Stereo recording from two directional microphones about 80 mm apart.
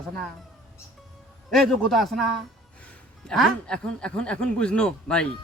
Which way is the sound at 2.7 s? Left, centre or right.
Centre.